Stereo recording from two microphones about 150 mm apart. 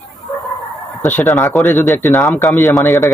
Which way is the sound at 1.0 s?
15° left (ahead or behind).